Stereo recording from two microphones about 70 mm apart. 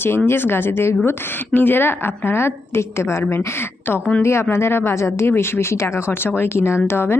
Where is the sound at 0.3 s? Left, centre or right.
Left.